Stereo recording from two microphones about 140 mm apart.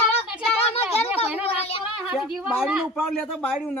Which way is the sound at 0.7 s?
45° left (ahead or behind).